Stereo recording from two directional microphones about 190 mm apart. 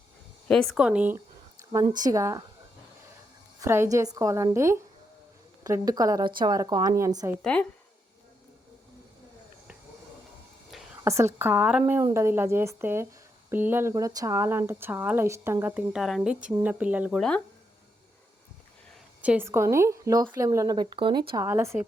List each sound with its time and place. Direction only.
0.4 s speech: centre (ahead or behind); by 2.4 s 15° right (ahead or behind)
3.6 s speech: 15° right (ahead or behind)
7.4 s speech: 10° left (ahead or behind)
11.0 s speech: 15° right (ahead or behind)
19.2 s speech: 10° right (ahead or behind)